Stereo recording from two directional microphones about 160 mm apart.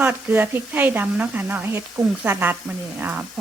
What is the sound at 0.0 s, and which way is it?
Speech, 10° right (ahead or behind).